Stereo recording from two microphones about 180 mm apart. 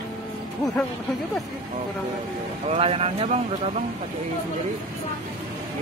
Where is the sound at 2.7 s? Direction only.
35° right (ahead or behind).